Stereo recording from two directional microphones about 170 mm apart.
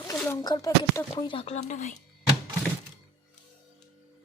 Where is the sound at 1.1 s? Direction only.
35° left (ahead or behind).